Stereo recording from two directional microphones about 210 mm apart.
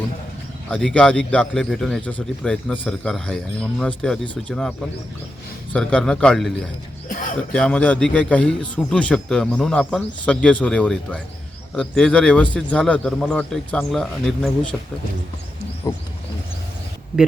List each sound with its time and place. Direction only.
0.7 s speech: 5° left (ahead or behind)
5.7 s speech: 5° left (ahead or behind)
7.1 s speech: 40° left (ahead or behind)
7.5 s speech: 5° left (ahead or behind)
15.9 s wild animals: 20° left (ahead or behind)